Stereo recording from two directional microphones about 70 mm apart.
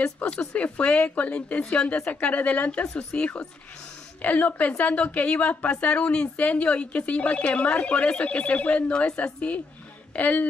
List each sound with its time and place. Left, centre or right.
0.0 s a woman's voice: centre